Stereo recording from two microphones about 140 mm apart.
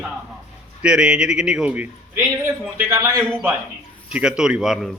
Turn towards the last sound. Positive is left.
turn(degrees=-5)  # may be behind; listen again after turning